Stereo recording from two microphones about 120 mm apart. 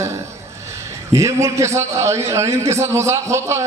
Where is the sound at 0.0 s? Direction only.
25° right (ahead or behind).